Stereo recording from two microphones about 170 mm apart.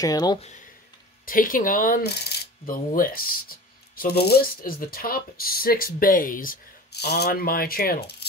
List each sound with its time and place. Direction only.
0.0 s speech: 20° left (ahead or behind)
1.2 s speech: 55° left (ahead or behind)